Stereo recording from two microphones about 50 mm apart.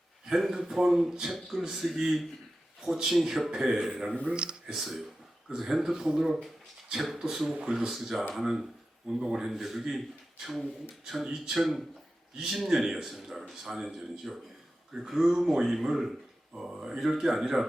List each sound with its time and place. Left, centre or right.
0.3 s a man's voice: centre
4.1 s speech: centre
4.7 s a man's voice: centre